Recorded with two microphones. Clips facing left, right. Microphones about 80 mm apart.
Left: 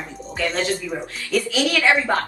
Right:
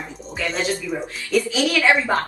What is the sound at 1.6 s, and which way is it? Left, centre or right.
Speech, centre.